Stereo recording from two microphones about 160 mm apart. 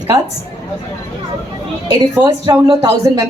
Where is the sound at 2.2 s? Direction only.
25° right (ahead or behind).